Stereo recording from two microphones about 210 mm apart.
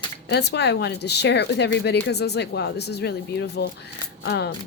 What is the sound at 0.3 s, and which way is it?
Speech, 50° left (ahead or behind).